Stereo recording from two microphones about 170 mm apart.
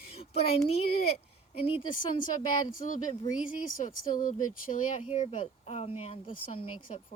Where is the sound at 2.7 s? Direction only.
50° left (ahead or behind).